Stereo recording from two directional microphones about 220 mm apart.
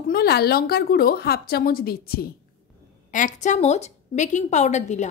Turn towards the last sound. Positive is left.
turn(degrees=30)  # may be behind; listen again after turning